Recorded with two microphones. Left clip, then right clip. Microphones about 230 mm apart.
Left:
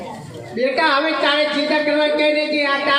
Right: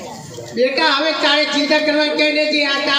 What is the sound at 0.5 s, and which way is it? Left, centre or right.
A man's voice, right.